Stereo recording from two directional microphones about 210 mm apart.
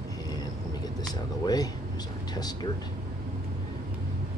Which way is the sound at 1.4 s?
20° left (ahead or behind).